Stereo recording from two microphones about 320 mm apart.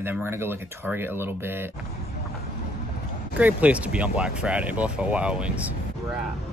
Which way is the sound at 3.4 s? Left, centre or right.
Centre.